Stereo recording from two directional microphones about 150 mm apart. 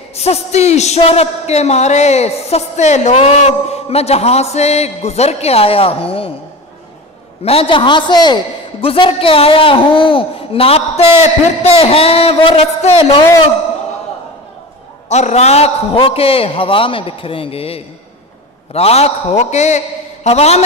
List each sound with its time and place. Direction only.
0.1 s speech: 45° left (ahead or behind)
7.4 s a man's voice: 40° left (ahead or behind)
15.0 s a man's voice: 50° left (ahead or behind)